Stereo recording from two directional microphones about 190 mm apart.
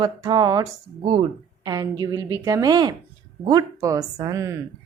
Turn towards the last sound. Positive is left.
turn(degrees=-15)  # may be behind; listen again after turning